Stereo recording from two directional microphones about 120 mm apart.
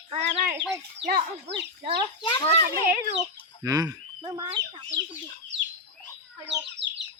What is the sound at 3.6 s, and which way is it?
Speech, 25° right (ahead or behind).